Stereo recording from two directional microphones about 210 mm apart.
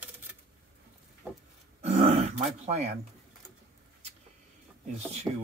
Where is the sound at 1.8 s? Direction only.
30° right (ahead or behind).